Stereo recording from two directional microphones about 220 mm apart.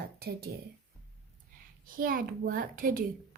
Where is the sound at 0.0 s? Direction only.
45° right (ahead or behind).